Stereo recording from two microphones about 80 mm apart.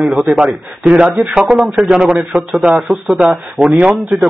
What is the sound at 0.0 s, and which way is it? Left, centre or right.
A man's voice, centre.